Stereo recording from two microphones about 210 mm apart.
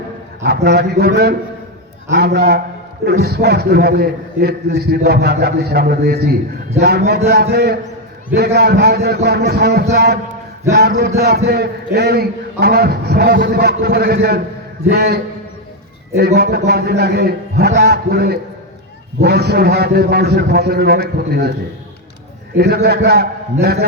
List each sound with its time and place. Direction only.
0.4 s a man's voice: 50° right (ahead or behind)
22.5 s a man's voice: 50° right (ahead or behind)